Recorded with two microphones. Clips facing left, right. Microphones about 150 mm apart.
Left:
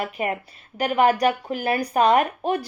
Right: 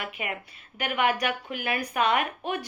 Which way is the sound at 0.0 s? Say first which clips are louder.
Left 8 dB; 40° left (ahead or behind).